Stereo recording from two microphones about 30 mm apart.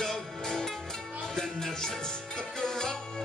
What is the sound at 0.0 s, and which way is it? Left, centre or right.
Music, centre.